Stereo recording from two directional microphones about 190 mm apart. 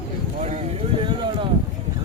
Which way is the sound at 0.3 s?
35° right (ahead or behind).